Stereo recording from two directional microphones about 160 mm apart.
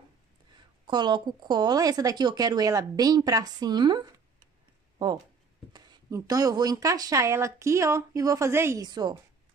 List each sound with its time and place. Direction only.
0.8 s a woman's voice: 25° right (ahead or behind)
4.9 s a sound: 25° right (ahead or behind)
5.7 s a woman's voice: 25° right (ahead or behind)
8.8 s a woman's voice: 25° right (ahead or behind)